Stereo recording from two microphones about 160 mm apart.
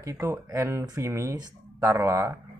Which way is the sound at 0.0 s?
20° right (ahead or behind).